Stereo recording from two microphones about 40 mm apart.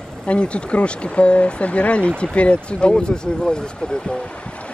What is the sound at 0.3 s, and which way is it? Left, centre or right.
Speech, left.